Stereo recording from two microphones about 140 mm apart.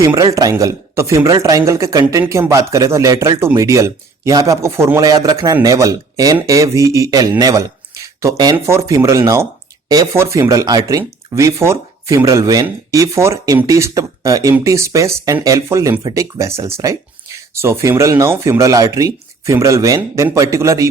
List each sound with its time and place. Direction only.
0.0 s speech: 20° right (ahead or behind)